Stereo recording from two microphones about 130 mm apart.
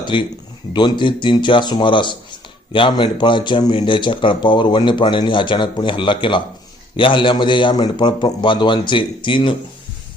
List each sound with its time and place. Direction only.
0.0 s a man's voice: 40° left (ahead or behind)